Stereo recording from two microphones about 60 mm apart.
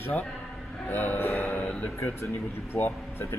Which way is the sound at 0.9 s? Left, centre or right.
Left.